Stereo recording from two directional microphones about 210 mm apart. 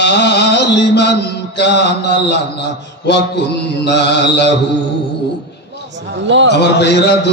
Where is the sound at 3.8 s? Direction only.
55° left (ahead or behind).